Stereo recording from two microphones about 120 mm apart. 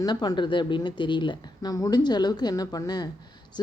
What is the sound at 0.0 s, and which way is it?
A woman's voice, 35° left (ahead or behind).